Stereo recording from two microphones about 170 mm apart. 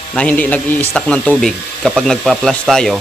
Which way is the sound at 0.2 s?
10° left (ahead or behind).